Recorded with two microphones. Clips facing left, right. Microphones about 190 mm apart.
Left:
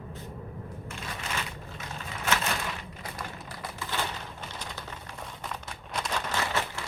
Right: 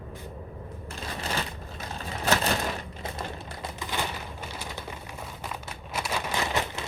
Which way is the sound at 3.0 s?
25° right (ahead or behind).